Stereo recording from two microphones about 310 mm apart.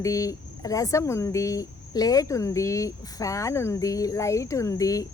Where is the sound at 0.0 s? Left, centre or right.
Centre.